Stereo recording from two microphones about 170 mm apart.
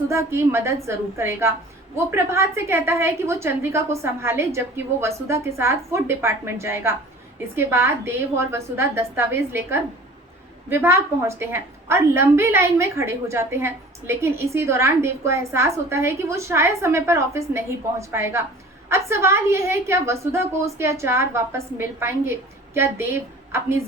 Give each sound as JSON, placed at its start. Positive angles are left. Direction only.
{"t": 0.1, "sound": "a woman's voice", "side_deg": -15}